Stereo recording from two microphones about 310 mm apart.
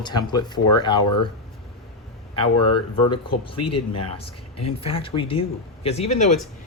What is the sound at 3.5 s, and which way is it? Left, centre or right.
Speech, left.